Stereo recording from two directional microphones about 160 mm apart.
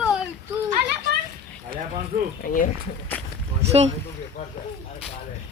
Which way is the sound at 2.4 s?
60° left (ahead or behind).